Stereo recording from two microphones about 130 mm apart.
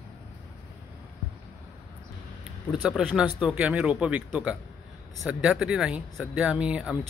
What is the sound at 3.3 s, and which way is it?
Speech, 5° right (ahead or behind).